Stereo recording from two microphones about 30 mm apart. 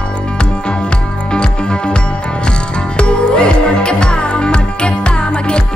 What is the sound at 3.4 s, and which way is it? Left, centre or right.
Music, left.